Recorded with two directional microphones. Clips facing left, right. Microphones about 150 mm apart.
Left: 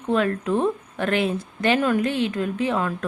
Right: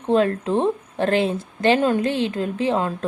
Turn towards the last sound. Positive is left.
turn(degrees=-25)  # may be behind; listen again after turning